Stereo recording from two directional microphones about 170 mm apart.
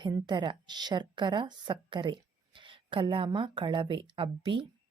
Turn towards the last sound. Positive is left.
turn(degrees=-30)  # may be behind; listen again after turning